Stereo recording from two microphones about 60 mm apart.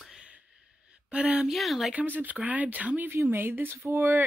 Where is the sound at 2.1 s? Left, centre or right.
Right.